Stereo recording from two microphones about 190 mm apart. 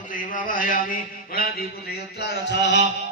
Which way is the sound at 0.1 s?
45° left (ahead or behind).